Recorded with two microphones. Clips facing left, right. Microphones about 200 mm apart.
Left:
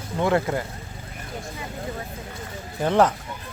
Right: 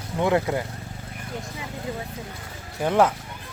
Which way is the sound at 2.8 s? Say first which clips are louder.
Left 1 dB; 10° right (ahead or behind).